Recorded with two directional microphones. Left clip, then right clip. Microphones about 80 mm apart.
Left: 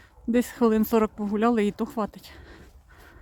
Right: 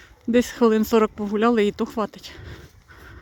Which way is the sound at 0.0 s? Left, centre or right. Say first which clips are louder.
Right 5 dB; centre.